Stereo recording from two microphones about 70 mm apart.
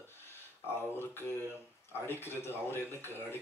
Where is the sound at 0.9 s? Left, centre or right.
Left.